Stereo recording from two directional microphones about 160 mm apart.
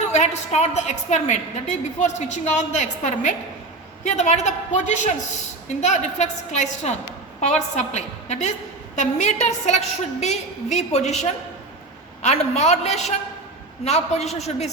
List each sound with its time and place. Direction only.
0.1 s a woman's voice: 45° left (ahead or behind)